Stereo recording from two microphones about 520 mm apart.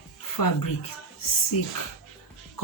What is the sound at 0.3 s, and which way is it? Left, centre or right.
Speech, left.